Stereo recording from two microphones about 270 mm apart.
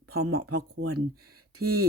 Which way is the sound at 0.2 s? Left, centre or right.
Right.